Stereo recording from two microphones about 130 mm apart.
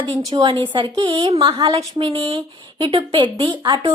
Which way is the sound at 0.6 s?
40° right (ahead or behind).